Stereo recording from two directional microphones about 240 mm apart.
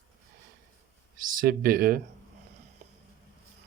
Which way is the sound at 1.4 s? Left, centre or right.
Right.